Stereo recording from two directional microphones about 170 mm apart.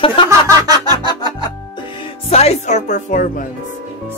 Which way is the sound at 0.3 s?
20° right (ahead or behind).